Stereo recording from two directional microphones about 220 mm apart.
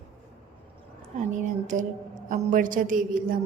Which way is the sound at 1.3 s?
35° right (ahead or behind).